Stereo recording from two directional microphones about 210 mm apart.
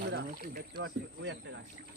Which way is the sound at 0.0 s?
50° right (ahead or behind).